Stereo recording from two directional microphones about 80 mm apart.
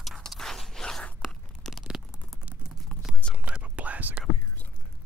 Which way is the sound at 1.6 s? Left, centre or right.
Centre.